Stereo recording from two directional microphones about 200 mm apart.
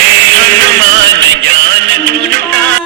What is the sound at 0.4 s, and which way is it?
Music, 55° right (ahead or behind).